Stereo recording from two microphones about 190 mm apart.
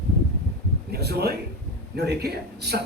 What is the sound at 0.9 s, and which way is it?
A man's voice, 60° right (ahead or behind).